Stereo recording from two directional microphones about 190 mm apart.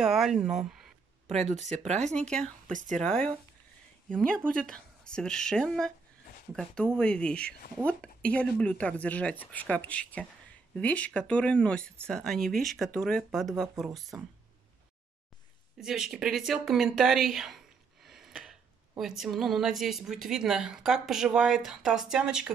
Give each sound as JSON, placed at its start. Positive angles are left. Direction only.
{"t": 0.0, "sound": "a sound", "side_deg": 0}
{"t": 1.3, "sound": "speech", "side_deg": -40}
{"t": 2.1, "sound": "speech", "side_deg": 5}
{"t": 2.7, "sound": "speech", "side_deg": -40}
{"t": 3.0, "sound": "speech", "side_deg": 5}
{"t": 15.8, "sound": "speech", "side_deg": 0}